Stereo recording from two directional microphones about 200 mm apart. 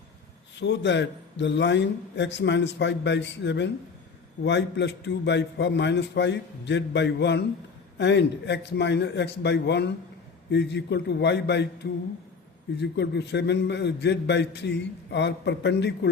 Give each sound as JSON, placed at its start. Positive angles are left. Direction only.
{"t": 0.6, "sound": "a man's voice", "side_deg": 60}